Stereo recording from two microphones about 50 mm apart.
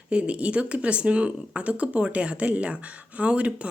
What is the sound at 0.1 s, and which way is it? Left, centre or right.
A woman's voice, right.